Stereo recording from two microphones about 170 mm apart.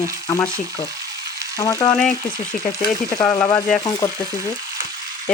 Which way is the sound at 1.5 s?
20° left (ahead or behind).